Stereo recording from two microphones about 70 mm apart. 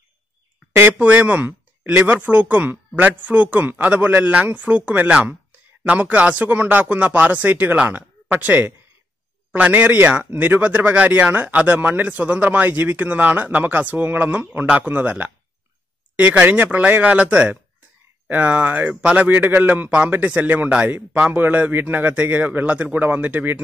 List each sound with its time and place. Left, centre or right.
0.9 s speech: right